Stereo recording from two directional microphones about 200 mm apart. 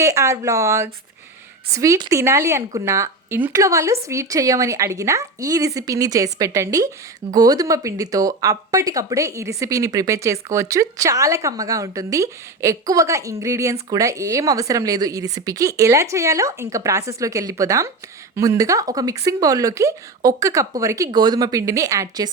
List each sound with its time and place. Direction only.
0.0 s a woman's voice: 15° right (ahead or behind)